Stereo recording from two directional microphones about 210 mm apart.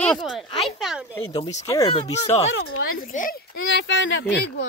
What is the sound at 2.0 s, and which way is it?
Speech, 30° left (ahead or behind).